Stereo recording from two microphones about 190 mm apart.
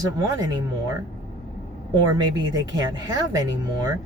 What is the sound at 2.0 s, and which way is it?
Speech, 20° right (ahead or behind).